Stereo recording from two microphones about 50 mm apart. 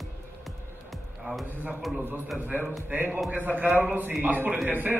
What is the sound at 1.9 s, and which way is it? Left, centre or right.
Speech, centre.